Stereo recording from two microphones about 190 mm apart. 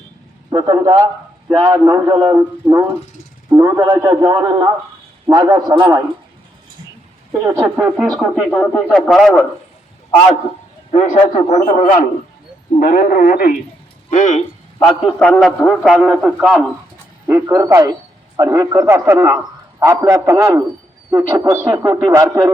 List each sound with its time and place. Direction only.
0.5 s a man's voice: 20° right (ahead or behind)
2.4 s a sound: 10° right (ahead or behind)
3.5 s a man's voice: 15° right (ahead or behind)
7.4 s a sound: 10° right (ahead or behind)
8.1 s a man's voice: 5° left (ahead or behind)
10.9 s a man's voice: 40° left (ahead or behind)
14.1 s a man's voice: 40° left (ahead or behind)
15.2 s a man's voice: 5° left (ahead or behind)
17.2 s a sound: 15° right (ahead or behind)